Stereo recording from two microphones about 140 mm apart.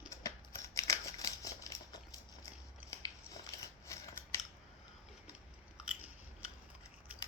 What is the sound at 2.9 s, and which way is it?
Biting, 25° left (ahead or behind).